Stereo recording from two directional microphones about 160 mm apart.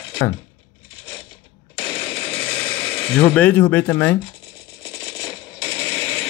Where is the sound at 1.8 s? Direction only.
5° left (ahead or behind).